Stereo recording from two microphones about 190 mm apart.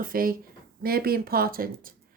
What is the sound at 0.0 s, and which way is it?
A woman's voice, 50° right (ahead or behind).